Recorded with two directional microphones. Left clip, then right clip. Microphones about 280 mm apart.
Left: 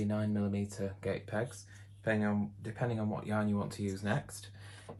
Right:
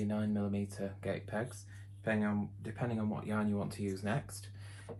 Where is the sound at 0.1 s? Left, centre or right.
Left.